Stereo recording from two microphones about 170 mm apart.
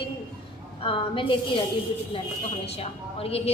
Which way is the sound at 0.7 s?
30° left (ahead or behind).